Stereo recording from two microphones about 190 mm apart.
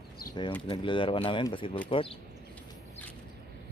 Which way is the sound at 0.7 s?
25° left (ahead or behind).